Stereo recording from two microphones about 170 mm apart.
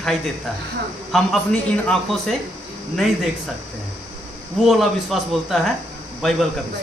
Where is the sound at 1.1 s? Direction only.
5° left (ahead or behind).